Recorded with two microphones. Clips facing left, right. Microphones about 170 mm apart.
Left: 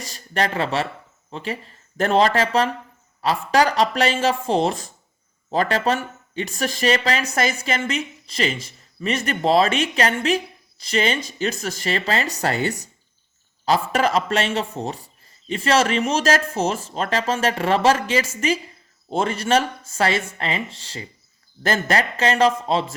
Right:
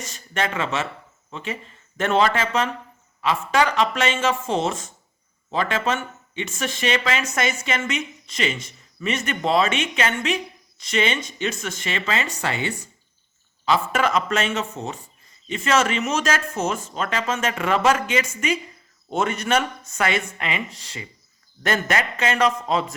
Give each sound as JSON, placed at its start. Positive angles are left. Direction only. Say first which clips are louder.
{"t": 0.0, "sound": "speech", "louder": "left 3 dB", "side_deg": 35}